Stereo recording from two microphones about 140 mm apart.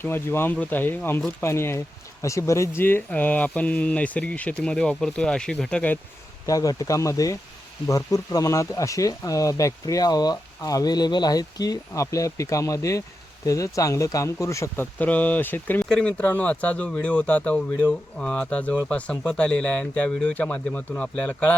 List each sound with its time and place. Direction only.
0.0 s speech: 15° left (ahead or behind)
6.4 s speech: 25° left (ahead or behind)